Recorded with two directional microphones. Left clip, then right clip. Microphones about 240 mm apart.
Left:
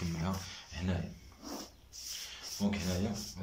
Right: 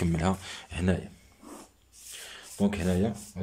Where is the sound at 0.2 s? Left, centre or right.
Right.